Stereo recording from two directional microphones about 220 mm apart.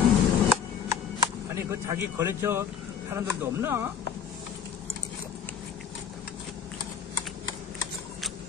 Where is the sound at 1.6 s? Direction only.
10° right (ahead or behind).